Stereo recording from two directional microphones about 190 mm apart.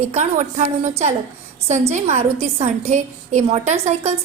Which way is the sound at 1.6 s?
35° right (ahead or behind).